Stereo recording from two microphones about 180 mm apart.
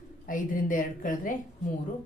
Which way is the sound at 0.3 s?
50° left (ahead or behind).